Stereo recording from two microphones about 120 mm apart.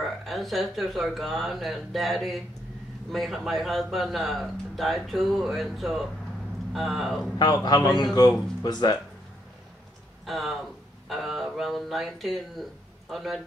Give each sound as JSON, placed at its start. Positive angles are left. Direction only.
{"t": 0.0, "sound": "a man's voice", "side_deg": 0}
{"t": 7.3, "sound": "speech", "side_deg": 35}
{"t": 10.2, "sound": "a man's voice", "side_deg": 0}